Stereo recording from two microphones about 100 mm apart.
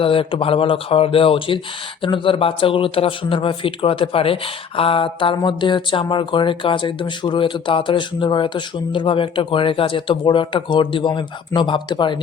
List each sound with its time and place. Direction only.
0.0 s speech: 65° left (ahead or behind)